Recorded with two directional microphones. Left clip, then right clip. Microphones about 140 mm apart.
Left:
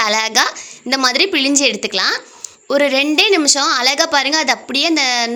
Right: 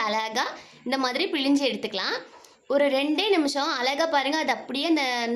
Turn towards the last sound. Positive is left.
turn(degrees=20)  # may be behind; listen again after turning